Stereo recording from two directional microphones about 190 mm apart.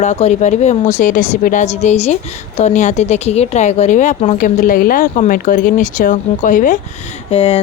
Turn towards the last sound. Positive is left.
turn(degrees=30)  # may be behind; listen again after turning